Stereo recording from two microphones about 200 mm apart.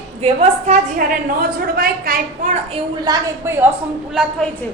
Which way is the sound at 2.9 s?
20° right (ahead or behind).